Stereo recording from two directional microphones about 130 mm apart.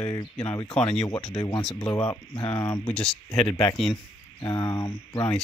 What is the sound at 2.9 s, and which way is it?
Speech, 5° left (ahead or behind).